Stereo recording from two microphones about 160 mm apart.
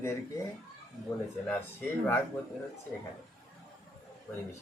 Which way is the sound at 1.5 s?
15° left (ahead or behind).